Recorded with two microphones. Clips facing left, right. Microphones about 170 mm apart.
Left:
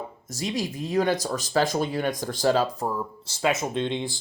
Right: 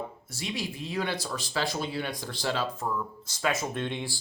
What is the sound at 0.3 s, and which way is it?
Speech, 40° left (ahead or behind).